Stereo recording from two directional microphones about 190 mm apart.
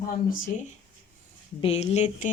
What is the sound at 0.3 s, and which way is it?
Speech, 45° left (ahead or behind).